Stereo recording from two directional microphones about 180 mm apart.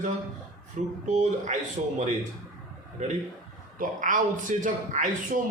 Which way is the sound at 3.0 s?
40° right (ahead or behind).